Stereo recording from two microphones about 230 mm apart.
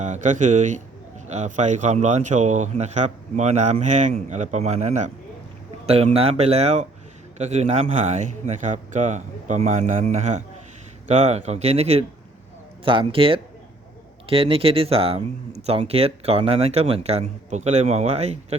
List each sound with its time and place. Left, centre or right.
0.0 s a man's voice: right